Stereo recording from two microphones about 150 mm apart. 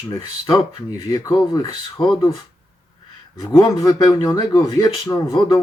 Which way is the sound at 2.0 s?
30° left (ahead or behind).